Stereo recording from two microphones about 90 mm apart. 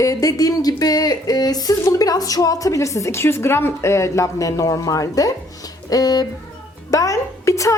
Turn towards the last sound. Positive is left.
turn(degrees=35)  # may be behind; listen again after turning